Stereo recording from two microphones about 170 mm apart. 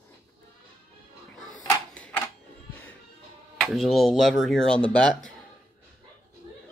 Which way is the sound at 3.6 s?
Centre (ahead or behind).